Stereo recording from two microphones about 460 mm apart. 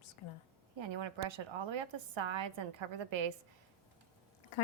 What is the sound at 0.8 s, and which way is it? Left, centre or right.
A woman's voice, right.